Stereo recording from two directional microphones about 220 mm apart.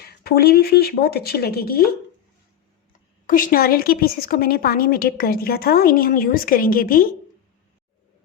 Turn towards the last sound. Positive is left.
turn(degrees=40)  # may be behind; listen again after turning